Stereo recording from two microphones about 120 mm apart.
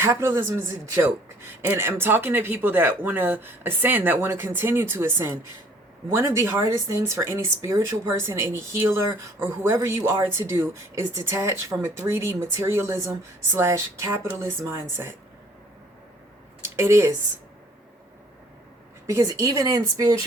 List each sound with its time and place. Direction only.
0.0 s speech: 20° right (ahead or behind)
1.6 s speech: 20° right (ahead or behind)
16.6 s speech: 20° right (ahead or behind)
19.0 s speech: 30° right (ahead or behind)